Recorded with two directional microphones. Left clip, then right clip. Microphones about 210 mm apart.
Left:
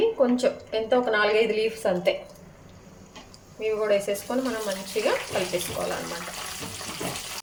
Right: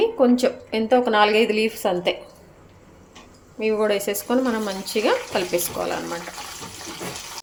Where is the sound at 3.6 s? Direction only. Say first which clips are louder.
Right 3 dB; 50° right (ahead or behind).